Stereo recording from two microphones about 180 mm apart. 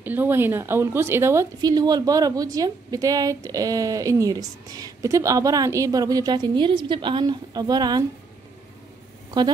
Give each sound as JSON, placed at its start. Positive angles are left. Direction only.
{"t": 0.0, "sound": "speech", "side_deg": -10}